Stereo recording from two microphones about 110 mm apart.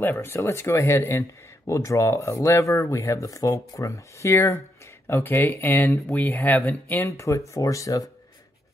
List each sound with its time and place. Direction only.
0.0 s speech: 20° left (ahead or behind)